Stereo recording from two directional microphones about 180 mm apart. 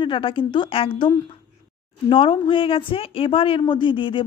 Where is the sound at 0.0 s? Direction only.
30° left (ahead or behind).